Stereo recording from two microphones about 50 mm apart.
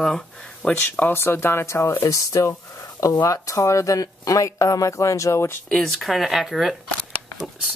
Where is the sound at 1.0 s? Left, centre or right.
Left.